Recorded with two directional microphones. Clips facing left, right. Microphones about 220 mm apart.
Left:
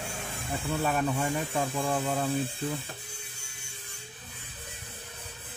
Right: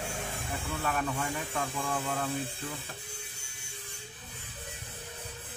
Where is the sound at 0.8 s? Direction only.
15° left (ahead or behind).